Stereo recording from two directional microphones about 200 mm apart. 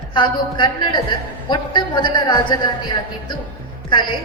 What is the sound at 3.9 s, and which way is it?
Speech, 25° left (ahead or behind).